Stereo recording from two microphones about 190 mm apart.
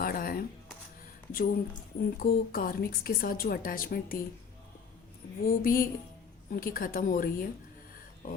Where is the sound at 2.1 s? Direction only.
50° left (ahead or behind).